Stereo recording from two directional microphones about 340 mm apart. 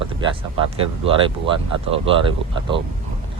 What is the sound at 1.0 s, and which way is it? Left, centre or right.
Speech, centre.